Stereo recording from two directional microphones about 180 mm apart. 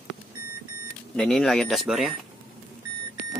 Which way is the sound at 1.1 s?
Centre (ahead or behind).